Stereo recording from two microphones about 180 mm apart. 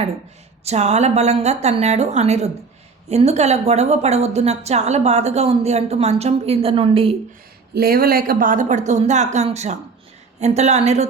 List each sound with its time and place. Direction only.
0.6 s a woman's voice: 35° right (ahead or behind)
7.7 s a woman's voice: 55° right (ahead or behind); by 11.1 s 40° right (ahead or behind)